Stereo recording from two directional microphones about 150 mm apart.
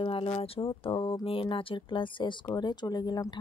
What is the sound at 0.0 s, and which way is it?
A woman's voice, 35° left (ahead or behind).